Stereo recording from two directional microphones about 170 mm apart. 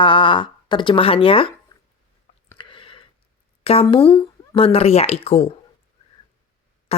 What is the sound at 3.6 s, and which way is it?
Speech, 35° left (ahead or behind).